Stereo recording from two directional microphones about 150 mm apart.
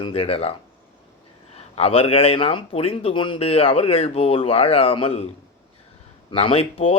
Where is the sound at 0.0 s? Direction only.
40° left (ahead or behind).